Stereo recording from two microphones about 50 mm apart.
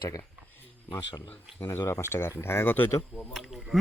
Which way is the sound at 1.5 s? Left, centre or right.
Left.